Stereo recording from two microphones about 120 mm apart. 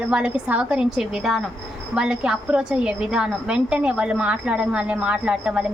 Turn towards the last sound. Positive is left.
turn(degrees=-10)  # may be behind; listen again after turning